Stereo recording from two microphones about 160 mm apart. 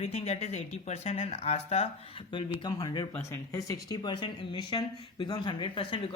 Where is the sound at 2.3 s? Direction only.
25° left (ahead or behind).